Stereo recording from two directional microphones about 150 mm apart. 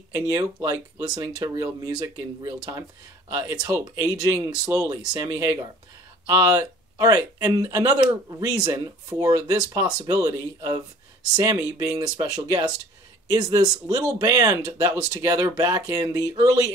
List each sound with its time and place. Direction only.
0.1 s speech: 25° right (ahead or behind)